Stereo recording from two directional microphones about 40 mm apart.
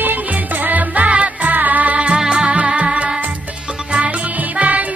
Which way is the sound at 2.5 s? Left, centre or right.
Right.